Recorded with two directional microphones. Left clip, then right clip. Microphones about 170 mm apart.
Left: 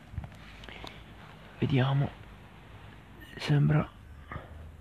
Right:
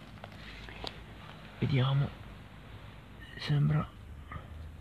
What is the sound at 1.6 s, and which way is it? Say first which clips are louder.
Speech: left 4 dB; 55° left (ahead or behind).